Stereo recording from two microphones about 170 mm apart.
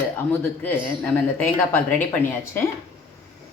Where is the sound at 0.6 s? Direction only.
5° left (ahead or behind).